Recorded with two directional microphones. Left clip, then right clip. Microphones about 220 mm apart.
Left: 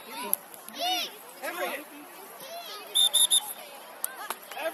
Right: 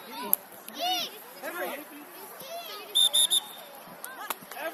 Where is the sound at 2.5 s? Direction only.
5° right (ahead or behind).